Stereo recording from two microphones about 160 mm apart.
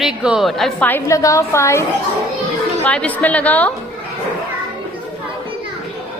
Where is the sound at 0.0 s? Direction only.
5° right (ahead or behind).